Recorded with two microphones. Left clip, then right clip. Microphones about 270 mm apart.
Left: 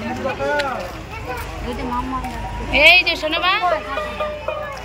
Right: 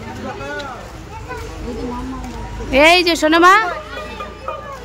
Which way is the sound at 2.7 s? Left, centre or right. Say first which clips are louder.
Right 1 dB; centre.